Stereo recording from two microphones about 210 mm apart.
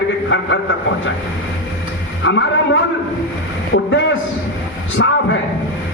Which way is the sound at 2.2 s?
60° left (ahead or behind).